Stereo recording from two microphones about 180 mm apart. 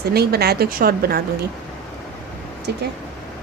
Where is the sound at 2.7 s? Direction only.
65° right (ahead or behind).